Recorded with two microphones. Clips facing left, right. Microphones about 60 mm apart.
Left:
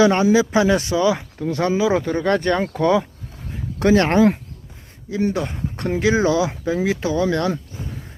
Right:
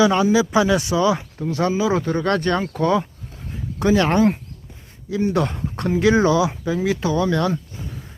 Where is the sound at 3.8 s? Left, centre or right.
Left.